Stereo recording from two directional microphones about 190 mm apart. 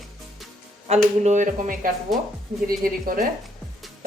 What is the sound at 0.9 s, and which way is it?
Speech, 35° right (ahead or behind).